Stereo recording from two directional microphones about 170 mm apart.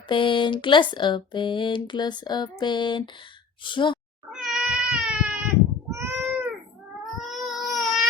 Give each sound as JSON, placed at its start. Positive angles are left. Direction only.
{"t": 0.1, "sound": "speech", "side_deg": 30}
{"t": 4.3, "sound": "cat", "side_deg": -5}
{"t": 7.0, "sound": "cat", "side_deg": 0}